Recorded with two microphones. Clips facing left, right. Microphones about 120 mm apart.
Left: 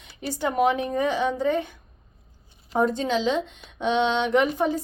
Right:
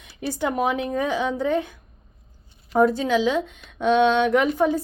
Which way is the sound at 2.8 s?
5° right (ahead or behind).